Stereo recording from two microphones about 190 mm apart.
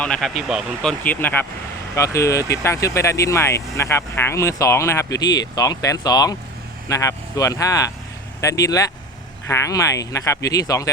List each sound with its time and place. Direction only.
0.0 s speech: 5° left (ahead or behind); by 10.8 s 20° left (ahead or behind)